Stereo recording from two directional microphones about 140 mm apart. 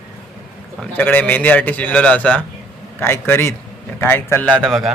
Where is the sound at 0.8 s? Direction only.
10° left (ahead or behind).